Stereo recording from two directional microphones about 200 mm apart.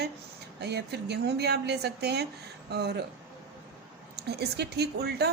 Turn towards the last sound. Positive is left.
turn(degrees=-55)  # may be behind; listen again after turning